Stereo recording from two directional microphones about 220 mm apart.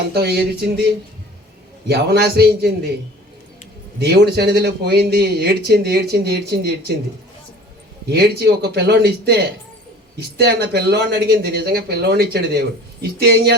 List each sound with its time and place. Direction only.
0.1 s speech: 45° right (ahead or behind)
1.9 s speech: 45° right (ahead or behind)
4.0 s speech: 45° right (ahead or behind)
8.1 s speech: 45° right (ahead or behind)